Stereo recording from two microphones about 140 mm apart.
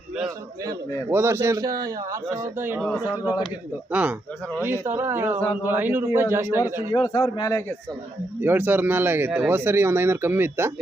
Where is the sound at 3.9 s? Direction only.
10° right (ahead or behind).